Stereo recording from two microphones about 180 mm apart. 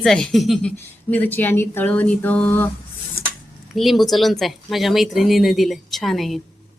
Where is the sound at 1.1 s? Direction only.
10° left (ahead or behind).